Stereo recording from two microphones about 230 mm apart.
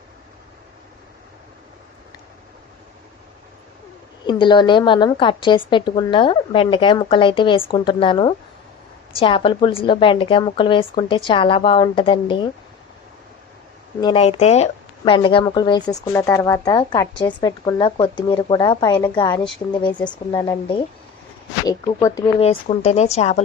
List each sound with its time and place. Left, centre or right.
4.3 s speech: left
14.0 s speech: left
20.0 s speech: centre
21.7 s speech: centre